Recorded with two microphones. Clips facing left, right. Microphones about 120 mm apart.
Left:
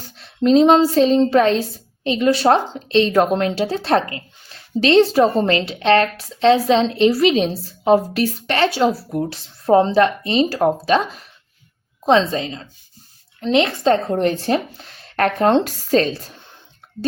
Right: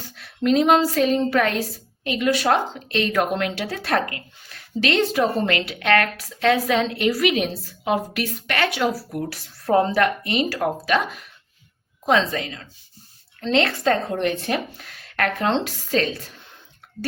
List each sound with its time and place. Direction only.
0.2 s a woman's voice: 25° left (ahead or behind)
15.4 s speech: 45° left (ahead or behind)